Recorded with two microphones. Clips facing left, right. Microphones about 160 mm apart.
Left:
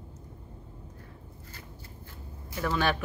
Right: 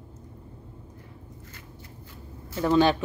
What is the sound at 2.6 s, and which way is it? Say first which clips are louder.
Speech: right 8 dB; 25° right (ahead or behind).